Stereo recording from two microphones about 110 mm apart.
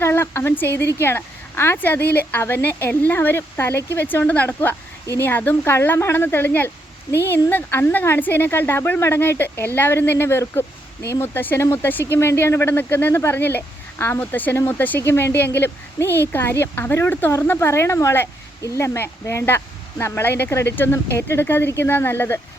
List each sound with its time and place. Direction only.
0.0 s a woman's voice: 20° left (ahead or behind)